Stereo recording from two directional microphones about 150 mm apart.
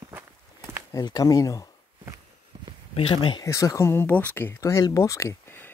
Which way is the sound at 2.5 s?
30° right (ahead or behind).